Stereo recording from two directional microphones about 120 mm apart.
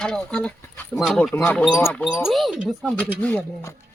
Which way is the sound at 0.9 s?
Centre (ahead or behind).